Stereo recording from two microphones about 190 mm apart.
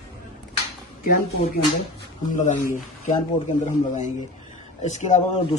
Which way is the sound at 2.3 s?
40° left (ahead or behind).